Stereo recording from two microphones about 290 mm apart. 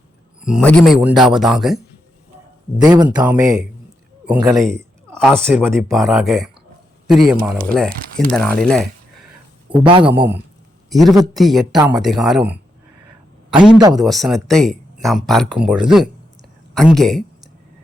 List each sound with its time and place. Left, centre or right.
0.4 s speech: centre
2.7 s speech: centre
9.6 s speech: centre
10.8 s a man's voice: centre
13.9 s speech: centre